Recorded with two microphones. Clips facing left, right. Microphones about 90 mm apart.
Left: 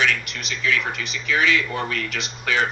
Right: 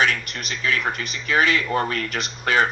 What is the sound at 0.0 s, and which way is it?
A man's voice, 40° right (ahead or behind).